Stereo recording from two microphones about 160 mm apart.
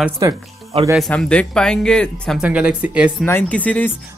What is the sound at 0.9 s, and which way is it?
Speech, 5° left (ahead or behind).